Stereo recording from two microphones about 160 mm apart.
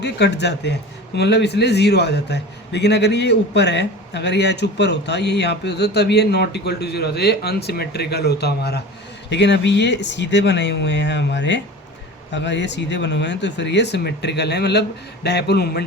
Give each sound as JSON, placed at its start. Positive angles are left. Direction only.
{"t": 0.0, "sound": "a man's voice", "side_deg": 90}